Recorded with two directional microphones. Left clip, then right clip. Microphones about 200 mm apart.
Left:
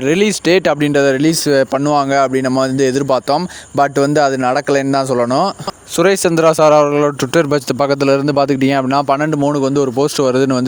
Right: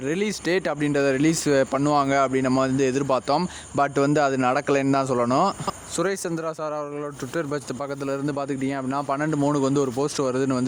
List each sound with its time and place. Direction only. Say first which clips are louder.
0.0 s a man's voice: left 12 dB; 40° left (ahead or behind); by 5.5 s 25° left (ahead or behind)
6.0 s speech: left 16 dB; 45° left (ahead or behind)
9.4 s speech: left 8 dB; 30° left (ahead or behind)